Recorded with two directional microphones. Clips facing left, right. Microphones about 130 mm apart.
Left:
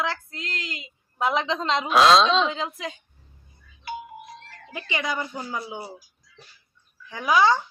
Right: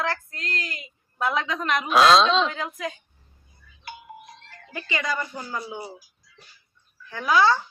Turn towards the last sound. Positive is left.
turn(degrees=15)  # may be behind; listen again after turning